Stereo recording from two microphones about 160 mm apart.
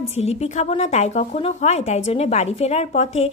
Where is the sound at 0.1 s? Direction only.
45° left (ahead or behind).